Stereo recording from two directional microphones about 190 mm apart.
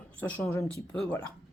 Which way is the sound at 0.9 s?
5° left (ahead or behind).